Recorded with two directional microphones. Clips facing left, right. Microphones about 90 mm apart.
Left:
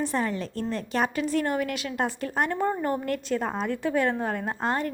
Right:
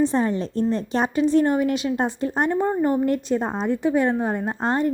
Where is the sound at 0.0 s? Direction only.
25° right (ahead or behind).